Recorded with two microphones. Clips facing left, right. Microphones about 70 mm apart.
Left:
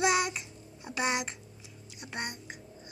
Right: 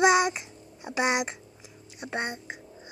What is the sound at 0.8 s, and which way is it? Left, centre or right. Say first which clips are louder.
Speech: right 5 dB; centre.